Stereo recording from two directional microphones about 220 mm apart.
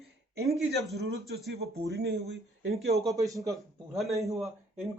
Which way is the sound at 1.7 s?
50° right (ahead or behind).